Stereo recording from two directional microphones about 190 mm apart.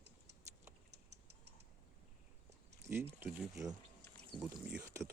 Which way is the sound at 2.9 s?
15° right (ahead or behind).